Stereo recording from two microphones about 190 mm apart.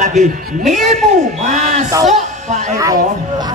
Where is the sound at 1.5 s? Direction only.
35° right (ahead or behind).